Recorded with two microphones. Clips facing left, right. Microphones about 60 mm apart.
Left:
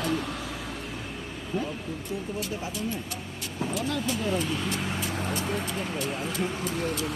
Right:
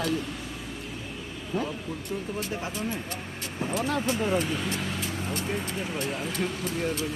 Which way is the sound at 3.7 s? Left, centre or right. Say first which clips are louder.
Right 3 dB; right.